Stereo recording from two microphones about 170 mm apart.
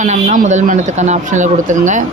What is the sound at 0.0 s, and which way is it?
Speech, 45° right (ahead or behind).